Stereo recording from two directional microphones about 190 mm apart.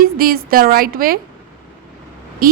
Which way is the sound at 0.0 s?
50° right (ahead or behind).